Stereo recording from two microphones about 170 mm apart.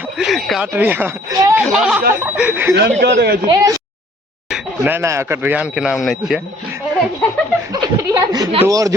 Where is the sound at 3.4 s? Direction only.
20° right (ahead or behind).